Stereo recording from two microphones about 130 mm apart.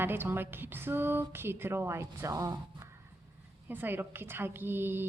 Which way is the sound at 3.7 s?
15° right (ahead or behind).